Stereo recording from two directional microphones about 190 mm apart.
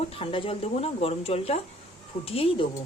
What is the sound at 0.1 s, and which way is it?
Speech, 30° left (ahead or behind).